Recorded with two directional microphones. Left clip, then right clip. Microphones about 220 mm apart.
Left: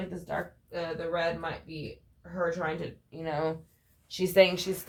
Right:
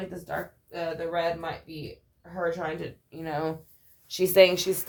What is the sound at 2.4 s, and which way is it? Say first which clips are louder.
Speech: right 1 dB; 25° right (ahead or behind).